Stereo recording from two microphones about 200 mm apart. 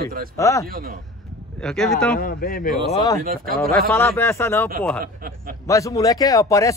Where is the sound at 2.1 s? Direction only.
45° left (ahead or behind).